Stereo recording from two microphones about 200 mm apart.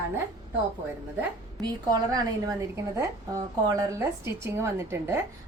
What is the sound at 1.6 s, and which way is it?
A woman's voice, 20° right (ahead or behind).